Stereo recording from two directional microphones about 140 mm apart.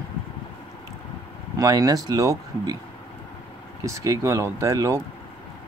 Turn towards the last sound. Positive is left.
turn(degrees=-20)  # may be behind; listen again after turning